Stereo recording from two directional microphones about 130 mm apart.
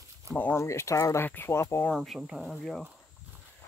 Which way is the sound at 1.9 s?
Centre (ahead or behind).